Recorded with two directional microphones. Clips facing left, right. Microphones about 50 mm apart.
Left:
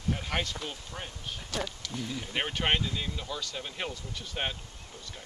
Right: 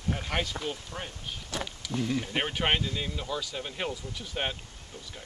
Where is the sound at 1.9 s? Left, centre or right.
Right.